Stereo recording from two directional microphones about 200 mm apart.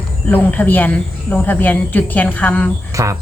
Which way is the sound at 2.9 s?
15° right (ahead or behind).